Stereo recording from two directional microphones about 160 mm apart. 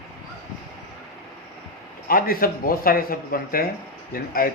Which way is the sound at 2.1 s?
65° left (ahead or behind).